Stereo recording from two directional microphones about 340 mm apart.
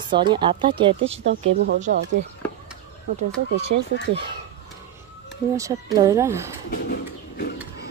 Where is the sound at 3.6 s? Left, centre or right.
Right.